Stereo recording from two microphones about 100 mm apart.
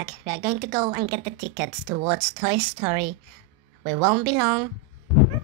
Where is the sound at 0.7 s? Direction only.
40° right (ahead or behind).